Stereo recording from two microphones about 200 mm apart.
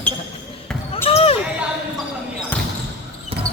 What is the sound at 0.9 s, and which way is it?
Basketball bounce, 30° left (ahead or behind).